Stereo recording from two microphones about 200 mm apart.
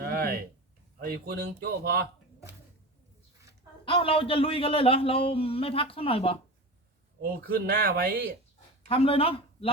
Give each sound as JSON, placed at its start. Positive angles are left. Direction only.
{"t": 0.0, "sound": "a sound", "side_deg": -50}
{"t": 0.9, "sound": "speech", "side_deg": -50}
{"t": 3.8, "sound": "speech", "side_deg": 25}
{"t": 7.2, "sound": "speech", "side_deg": -50}
{"t": 8.9, "sound": "speech", "side_deg": 30}